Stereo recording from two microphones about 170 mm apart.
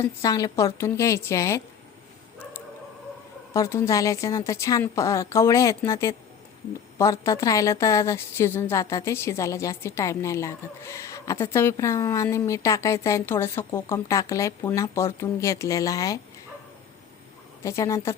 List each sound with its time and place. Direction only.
0.0 s a woman's voice: 20° left (ahead or behind)
3.5 s a woman's voice: 20° left (ahead or behind)
17.6 s a woman's voice: 15° left (ahead or behind)